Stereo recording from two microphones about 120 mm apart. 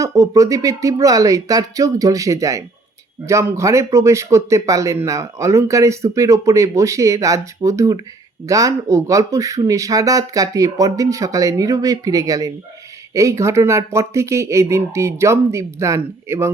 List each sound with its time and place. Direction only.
0.0 s speech: 30° right (ahead or behind)